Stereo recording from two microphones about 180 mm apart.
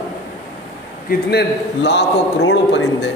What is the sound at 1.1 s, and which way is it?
A man's voice, 65° left (ahead or behind).